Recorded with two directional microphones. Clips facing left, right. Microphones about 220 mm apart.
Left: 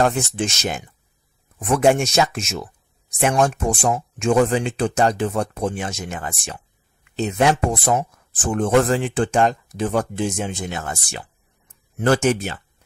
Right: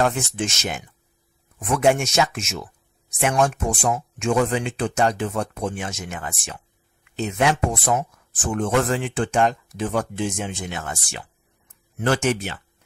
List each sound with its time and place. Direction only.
0.0 s speech: 35° left (ahead or behind)